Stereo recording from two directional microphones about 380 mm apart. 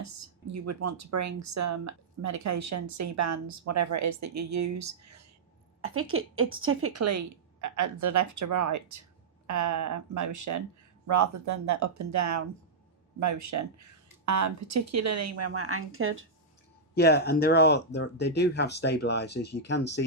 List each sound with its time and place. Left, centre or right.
0.0 s speech: right
5.8 s speech: right
16.9 s speech: left